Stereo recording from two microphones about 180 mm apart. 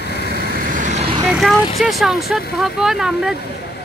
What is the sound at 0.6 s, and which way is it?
Vehicle, 45° right (ahead or behind).